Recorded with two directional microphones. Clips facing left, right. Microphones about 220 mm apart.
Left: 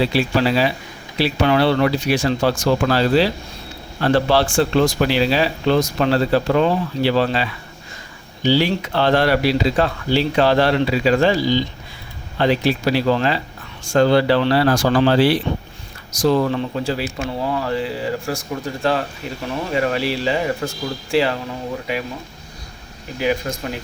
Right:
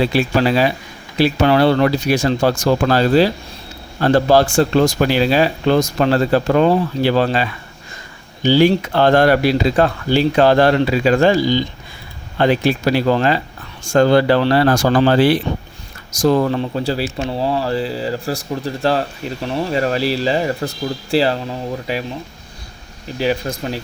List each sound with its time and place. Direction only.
0.1 s speech: 50° right (ahead or behind)
8.4 s speech: 45° right (ahead or behind)
23.2 s speech: 35° right (ahead or behind)